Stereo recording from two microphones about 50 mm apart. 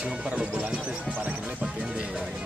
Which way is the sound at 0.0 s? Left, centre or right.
Right.